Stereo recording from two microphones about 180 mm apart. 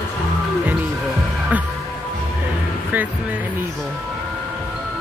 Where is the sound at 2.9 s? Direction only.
10° right (ahead or behind).